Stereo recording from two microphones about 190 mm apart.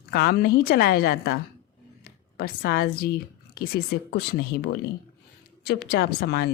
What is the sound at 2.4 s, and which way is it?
A woman's voice, 55° left (ahead or behind).